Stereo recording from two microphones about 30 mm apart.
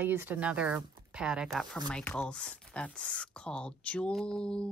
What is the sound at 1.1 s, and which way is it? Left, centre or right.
Speech, right.